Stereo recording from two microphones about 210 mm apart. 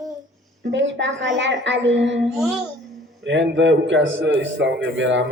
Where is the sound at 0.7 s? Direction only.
60° right (ahead or behind).